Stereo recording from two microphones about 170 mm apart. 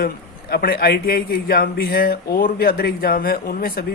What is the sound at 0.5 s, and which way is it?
Speech, 65° left (ahead or behind).